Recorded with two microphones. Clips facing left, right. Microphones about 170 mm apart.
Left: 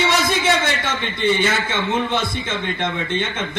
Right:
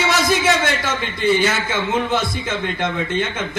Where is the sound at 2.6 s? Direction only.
5° right (ahead or behind).